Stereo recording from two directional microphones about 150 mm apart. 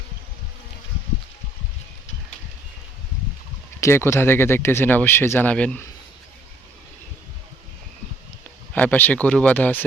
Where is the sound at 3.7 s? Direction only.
20° left (ahead or behind).